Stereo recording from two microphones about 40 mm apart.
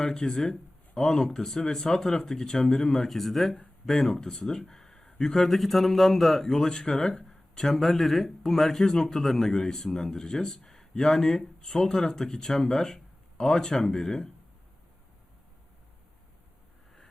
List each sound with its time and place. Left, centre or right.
0.0 s speech: centre
4.6 s a sound: centre
5.2 s speech: centre